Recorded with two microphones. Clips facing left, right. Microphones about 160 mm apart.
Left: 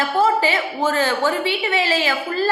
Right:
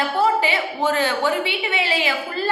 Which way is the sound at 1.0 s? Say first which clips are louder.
Left 1 dB; 40° left (ahead or behind).